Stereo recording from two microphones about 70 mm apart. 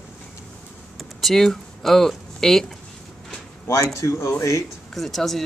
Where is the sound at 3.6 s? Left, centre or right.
Left.